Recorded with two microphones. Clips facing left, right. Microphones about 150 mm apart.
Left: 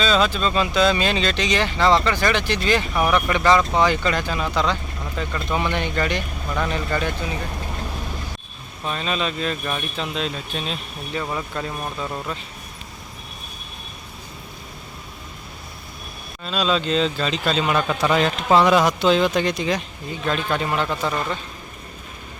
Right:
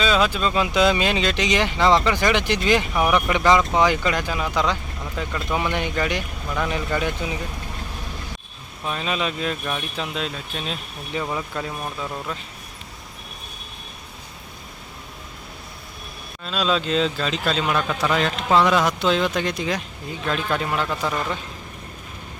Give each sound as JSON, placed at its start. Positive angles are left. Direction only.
{"t": 0.0, "sound": "speech", "side_deg": -10}
{"t": 8.9, "sound": "speech", "side_deg": -10}
{"t": 16.5, "sound": "speech", "side_deg": 0}